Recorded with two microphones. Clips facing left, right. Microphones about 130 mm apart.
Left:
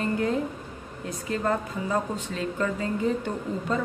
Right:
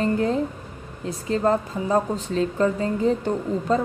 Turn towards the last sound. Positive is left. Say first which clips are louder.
# right 6 dB
turn(degrees=-35)  # may be behind; listen again after turning